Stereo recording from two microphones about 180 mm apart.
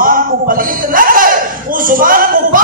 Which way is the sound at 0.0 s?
50° right (ahead or behind).